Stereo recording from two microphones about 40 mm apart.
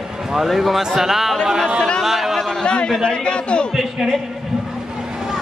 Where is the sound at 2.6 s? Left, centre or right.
Left.